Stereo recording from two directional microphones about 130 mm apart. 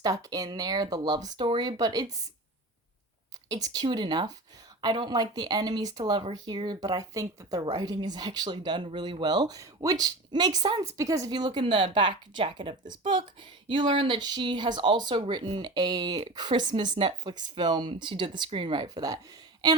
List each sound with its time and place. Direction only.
0.0 s speech: 30° right (ahead or behind)
3.5 s speech: 30° right (ahead or behind)